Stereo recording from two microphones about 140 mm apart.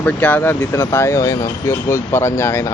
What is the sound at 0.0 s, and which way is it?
Speech, 10° left (ahead or behind).